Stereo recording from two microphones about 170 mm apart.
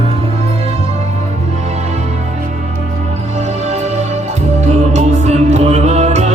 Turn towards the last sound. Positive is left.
turn(degrees=-40)  # may be behind; listen again after turning